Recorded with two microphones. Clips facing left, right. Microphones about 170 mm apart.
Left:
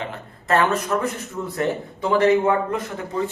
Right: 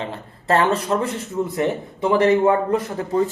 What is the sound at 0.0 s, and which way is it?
Speech, 30° right (ahead or behind).